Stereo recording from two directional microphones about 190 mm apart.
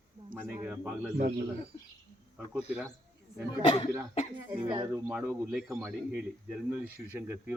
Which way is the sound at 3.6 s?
30° left (ahead or behind).